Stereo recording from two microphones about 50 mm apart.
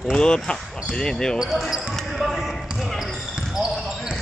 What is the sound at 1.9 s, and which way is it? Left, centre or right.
Basketball bounce, centre.